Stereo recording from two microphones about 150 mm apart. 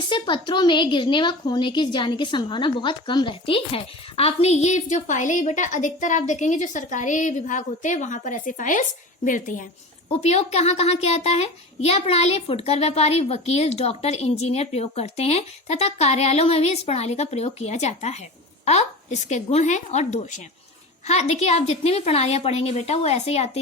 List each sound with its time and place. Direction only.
0.1 s a woman's voice: 30° left (ahead or behind); by 9.6 s 60° left (ahead or behind)
10.1 s a woman's voice: 45° left (ahead or behind)